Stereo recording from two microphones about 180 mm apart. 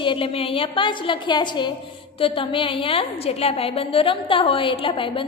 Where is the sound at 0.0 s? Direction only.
30° left (ahead or behind).